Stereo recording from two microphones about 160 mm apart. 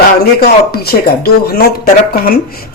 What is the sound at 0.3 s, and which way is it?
Speech, 75° left (ahead or behind).